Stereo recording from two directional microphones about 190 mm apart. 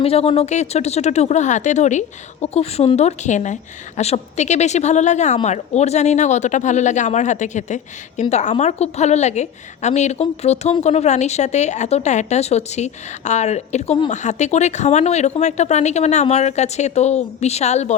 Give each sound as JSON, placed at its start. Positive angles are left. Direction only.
{"t": 0.0, "sound": "speech", "side_deg": 30}